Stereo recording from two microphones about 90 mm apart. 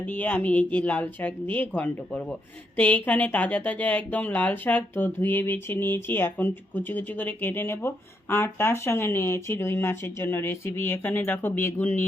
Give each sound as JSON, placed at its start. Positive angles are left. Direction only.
{"t": 0.1, "sound": "speech", "side_deg": 15}